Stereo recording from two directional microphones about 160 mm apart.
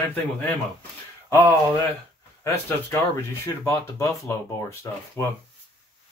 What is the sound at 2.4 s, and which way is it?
Speech, 15° left (ahead or behind).